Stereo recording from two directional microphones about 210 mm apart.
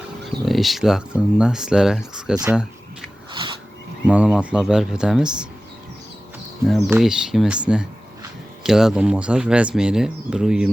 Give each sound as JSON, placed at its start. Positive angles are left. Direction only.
{"t": 0.3, "sound": "speech", "side_deg": 0}
{"t": 4.0, "sound": "speech", "side_deg": -5}
{"t": 6.7, "sound": "speech", "side_deg": 0}